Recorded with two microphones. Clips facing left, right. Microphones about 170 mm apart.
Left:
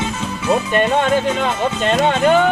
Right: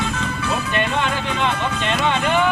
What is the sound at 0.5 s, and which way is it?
Speech, 40° left (ahead or behind).